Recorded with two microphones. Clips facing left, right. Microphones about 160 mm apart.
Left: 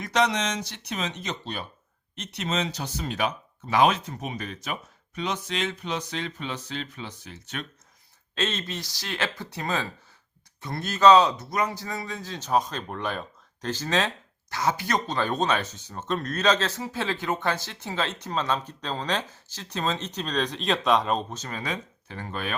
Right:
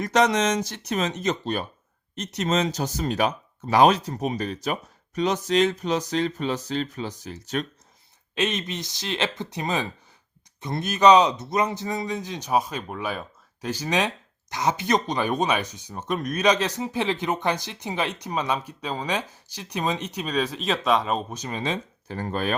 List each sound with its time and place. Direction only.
0.0 s speech: 45° right (ahead or behind)
8.4 s speech: 15° right (ahead or behind)
22.0 s speech: 40° right (ahead or behind)